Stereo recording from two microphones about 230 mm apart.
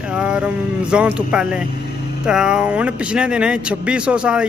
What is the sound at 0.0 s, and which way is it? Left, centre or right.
A man's voice, centre.